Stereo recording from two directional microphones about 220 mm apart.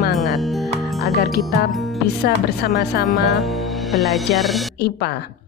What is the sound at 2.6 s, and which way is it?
Speech, 45° left (ahead or behind).